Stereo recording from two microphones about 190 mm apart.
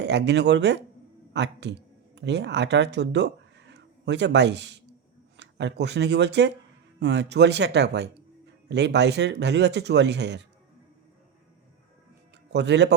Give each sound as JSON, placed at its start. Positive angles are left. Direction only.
{"t": 0.0, "sound": "speech", "side_deg": -65}
{"t": 12.5, "sound": "speech", "side_deg": -65}